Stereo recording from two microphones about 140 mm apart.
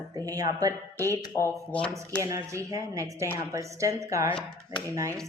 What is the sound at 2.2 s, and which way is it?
Speech, 25° right (ahead or behind).